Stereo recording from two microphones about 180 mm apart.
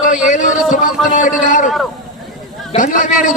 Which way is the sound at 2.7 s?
45° left (ahead or behind).